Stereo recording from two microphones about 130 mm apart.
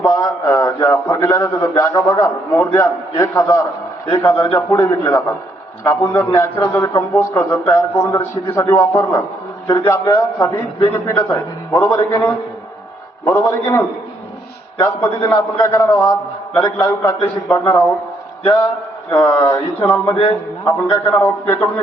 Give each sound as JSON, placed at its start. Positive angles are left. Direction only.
{"t": 0.0, "sound": "a man's voice", "side_deg": 25}
{"t": 19.1, "sound": "a man's voice", "side_deg": 20}